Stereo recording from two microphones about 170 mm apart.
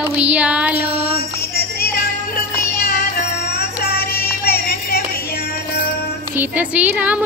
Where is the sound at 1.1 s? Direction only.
60° left (ahead or behind).